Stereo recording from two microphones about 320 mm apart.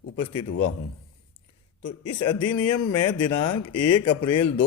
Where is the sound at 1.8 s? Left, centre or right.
Left.